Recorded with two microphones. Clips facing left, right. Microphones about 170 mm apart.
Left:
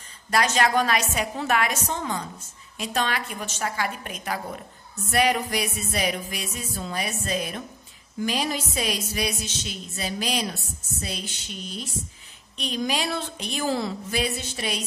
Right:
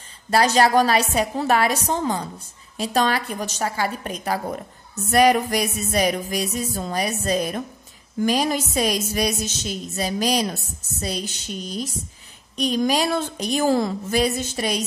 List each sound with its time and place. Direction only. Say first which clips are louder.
0.3 s a woman's voice: right 5 dB; 35° right (ahead or behind)